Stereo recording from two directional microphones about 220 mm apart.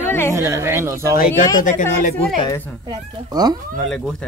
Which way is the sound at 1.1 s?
40° left (ahead or behind).